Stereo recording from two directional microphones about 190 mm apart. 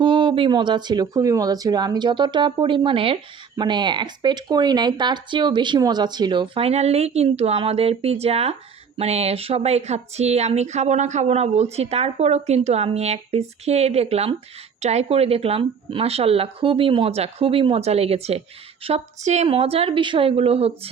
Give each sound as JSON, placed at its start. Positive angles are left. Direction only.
{"t": 0.0, "sound": "speech", "side_deg": -25}